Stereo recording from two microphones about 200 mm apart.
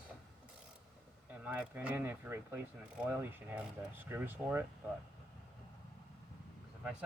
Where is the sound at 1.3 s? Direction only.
10° right (ahead or behind).